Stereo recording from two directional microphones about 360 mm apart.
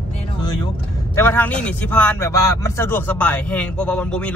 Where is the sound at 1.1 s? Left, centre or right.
Centre.